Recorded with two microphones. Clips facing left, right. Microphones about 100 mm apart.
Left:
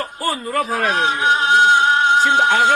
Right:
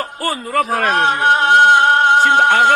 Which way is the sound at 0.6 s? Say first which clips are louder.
Right 4 dB; 60° right (ahead or behind).